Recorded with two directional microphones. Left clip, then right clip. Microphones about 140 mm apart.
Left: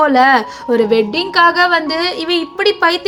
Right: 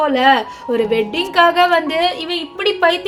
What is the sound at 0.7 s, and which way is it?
A woman's voice, 25° left (ahead or behind).